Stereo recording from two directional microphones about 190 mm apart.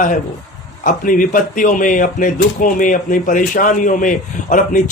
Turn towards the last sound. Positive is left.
turn(degrees=45)  # may be behind; listen again after turning